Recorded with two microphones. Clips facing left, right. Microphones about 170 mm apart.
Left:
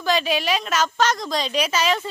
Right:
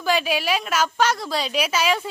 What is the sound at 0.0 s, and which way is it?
A woman's voice, 10° right (ahead or behind).